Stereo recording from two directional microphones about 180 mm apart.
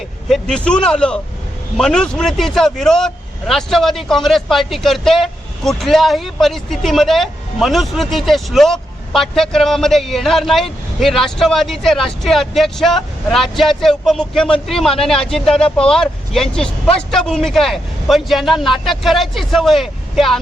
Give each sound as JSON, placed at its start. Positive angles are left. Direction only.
{"t": 0.3, "sound": "speech", "side_deg": 0}